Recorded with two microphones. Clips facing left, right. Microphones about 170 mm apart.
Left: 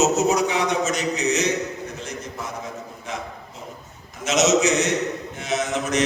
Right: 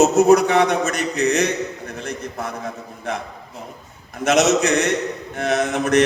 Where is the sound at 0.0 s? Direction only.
55° right (ahead or behind).